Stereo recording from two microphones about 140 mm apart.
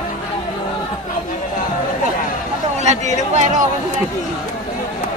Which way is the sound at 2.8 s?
55° right (ahead or behind).